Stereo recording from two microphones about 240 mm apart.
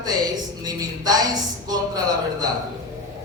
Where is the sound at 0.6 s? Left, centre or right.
Centre.